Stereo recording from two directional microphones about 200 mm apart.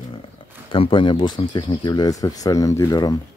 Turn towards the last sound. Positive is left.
turn(degrees=20)  # may be behind; listen again after turning